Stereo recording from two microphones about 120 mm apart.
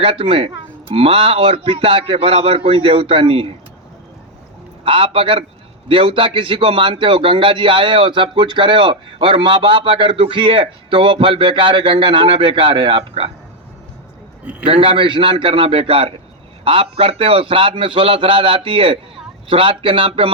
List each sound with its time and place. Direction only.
0.0 s a man's voice: 45° right (ahead or behind)
4.8 s a man's voice: 45° right (ahead or behind)
14.7 s a man's voice: 50° right (ahead or behind)